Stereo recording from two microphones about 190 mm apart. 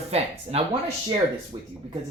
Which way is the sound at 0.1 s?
35° right (ahead or behind).